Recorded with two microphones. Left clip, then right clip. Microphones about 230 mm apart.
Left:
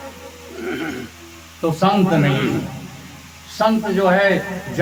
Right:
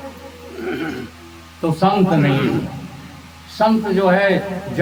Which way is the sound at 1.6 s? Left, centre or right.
Centre.